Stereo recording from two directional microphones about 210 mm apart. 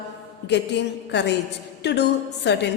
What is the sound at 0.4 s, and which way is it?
A woman's voice, 55° left (ahead or behind).